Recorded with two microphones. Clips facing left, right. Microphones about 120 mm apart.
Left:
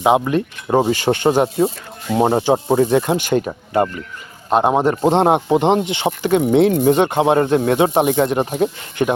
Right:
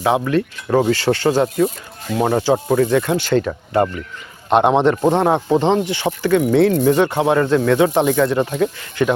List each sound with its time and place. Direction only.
0.0 s speech: 20° left (ahead or behind)
4.4 s speech: 5° left (ahead or behind); by 8.4 s 20° left (ahead or behind)
8.4 s speech: 30° left (ahead or behind)